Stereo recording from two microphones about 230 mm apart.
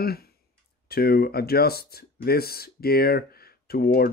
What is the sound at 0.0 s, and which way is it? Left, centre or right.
Speech, left.